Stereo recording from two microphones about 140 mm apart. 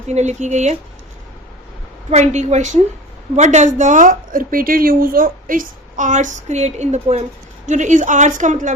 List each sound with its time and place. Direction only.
0.1 s a woman's voice: 55° right (ahead or behind)
2.0 s a woman's voice: 55° right (ahead or behind)